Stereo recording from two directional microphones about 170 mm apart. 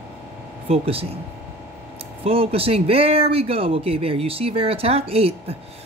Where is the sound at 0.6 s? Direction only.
35° right (ahead or behind).